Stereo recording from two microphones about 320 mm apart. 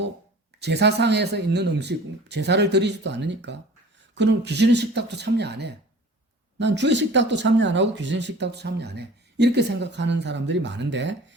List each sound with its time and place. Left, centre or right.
0.6 s speech: right